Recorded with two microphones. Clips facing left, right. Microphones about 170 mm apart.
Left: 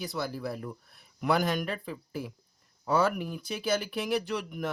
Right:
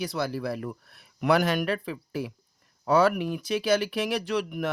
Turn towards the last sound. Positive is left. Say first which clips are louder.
# right 5 dB
turn(degrees=-70)  # may be behind; listen again after turning